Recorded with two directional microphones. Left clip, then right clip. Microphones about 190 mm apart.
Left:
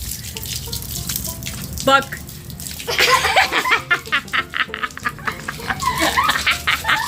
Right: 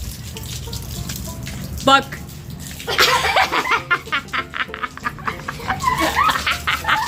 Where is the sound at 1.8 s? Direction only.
25° right (ahead or behind).